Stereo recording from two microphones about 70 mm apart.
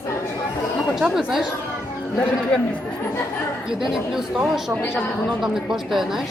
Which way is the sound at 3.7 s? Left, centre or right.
Centre.